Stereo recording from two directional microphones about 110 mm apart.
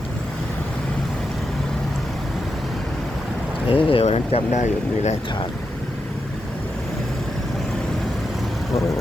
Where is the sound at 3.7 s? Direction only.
60° left (ahead or behind); by 5.2 s 90° left.